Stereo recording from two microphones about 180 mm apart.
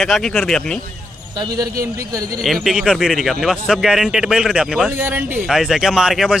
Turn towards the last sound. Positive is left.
turn(degrees=0)  # may be behind; listen again after turning